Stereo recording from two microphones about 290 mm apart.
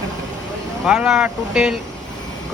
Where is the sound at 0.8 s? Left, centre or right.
Centre.